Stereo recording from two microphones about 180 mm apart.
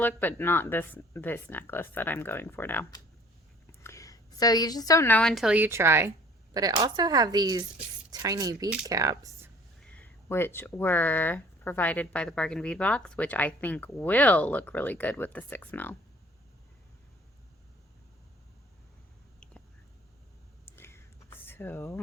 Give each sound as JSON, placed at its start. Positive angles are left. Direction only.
{"t": 0.0, "sound": "a woman's voice", "side_deg": 10}
{"t": 9.8, "sound": "speech", "side_deg": 10}
{"t": 20.7, "sound": "a sound", "side_deg": 15}